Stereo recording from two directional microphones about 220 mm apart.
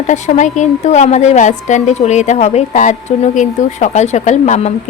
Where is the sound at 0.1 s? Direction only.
35° left (ahead or behind).